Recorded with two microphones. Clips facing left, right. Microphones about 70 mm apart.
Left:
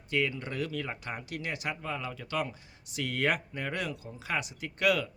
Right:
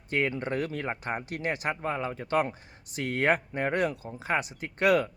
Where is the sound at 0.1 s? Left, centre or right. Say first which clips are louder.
Right 3 dB; right.